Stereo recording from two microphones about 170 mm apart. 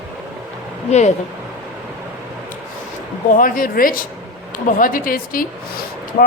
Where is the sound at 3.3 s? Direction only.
55° left (ahead or behind).